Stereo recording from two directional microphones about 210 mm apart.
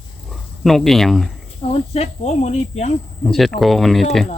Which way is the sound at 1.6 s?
30° left (ahead or behind).